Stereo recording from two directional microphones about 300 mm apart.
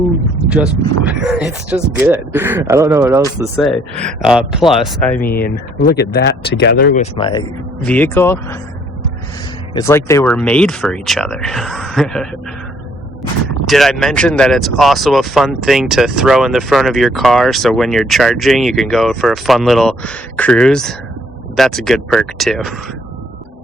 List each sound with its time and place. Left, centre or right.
1.0 s speech: centre
5.2 s speech: left
7.9 s speech: centre
9.7 s speech: centre
13.7 s speech: centre